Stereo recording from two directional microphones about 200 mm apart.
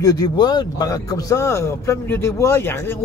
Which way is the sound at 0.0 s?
20° left (ahead or behind).